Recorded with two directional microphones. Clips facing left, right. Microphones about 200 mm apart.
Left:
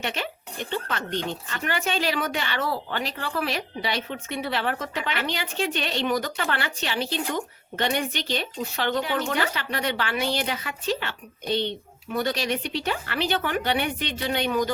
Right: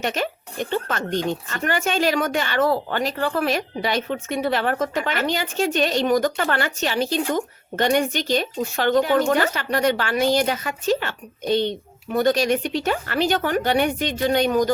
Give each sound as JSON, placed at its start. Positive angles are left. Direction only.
{"t": 0.0, "sound": "speech", "side_deg": -45}